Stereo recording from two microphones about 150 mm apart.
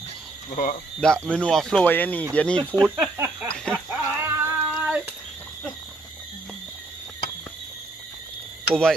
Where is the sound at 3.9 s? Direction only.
15° right (ahead or behind).